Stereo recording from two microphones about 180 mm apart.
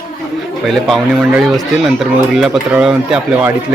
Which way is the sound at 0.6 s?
Centre (ahead or behind).